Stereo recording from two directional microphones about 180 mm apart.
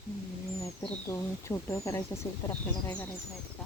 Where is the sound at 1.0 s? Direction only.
15° left (ahead or behind).